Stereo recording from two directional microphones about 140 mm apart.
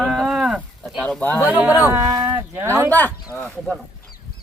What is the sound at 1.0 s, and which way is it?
Speech, 10° left (ahead or behind).